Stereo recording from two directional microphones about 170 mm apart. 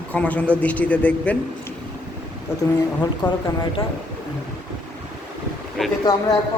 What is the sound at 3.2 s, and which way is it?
Speech, 10° left (ahead or behind).